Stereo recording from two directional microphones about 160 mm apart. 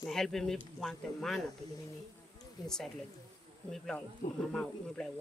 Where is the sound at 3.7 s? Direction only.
5° left (ahead or behind).